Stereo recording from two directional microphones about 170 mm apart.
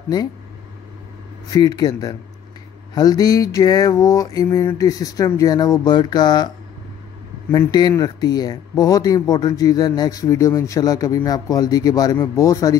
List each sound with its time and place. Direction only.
1.5 s speech: 25° left (ahead or behind)
7.5 s speech: 25° left (ahead or behind)